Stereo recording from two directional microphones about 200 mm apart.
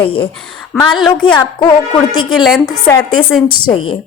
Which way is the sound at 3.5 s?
25° left (ahead or behind).